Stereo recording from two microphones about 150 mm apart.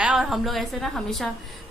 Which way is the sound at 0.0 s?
5° right (ahead or behind).